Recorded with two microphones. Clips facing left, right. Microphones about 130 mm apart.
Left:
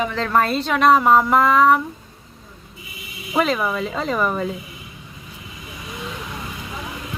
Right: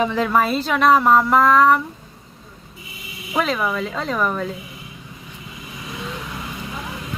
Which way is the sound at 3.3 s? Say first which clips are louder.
Left 1 dB; 5° left (ahead or behind).